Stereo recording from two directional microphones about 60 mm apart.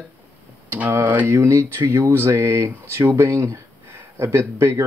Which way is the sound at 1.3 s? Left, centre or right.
Right.